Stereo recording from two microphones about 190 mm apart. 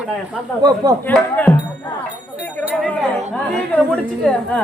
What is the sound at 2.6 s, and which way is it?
Speech, 5° left (ahead or behind).